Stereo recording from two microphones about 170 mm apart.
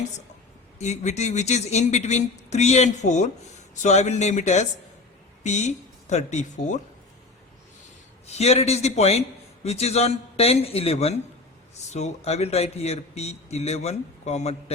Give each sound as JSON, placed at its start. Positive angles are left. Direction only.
{"t": 0.8, "sound": "speech", "side_deg": 40}
{"t": 8.3, "sound": "a man's voice", "side_deg": 40}